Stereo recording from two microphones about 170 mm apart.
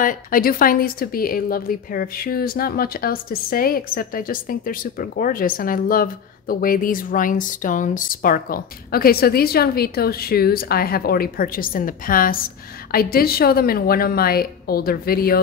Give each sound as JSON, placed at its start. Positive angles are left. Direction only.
{"t": 0.0, "sound": "speech", "side_deg": 55}